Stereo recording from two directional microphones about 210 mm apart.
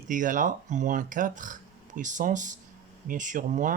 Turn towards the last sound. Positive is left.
turn(degrees=-35)  # may be behind; listen again after turning